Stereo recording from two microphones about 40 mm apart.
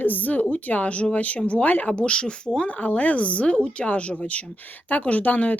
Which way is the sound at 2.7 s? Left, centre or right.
Left.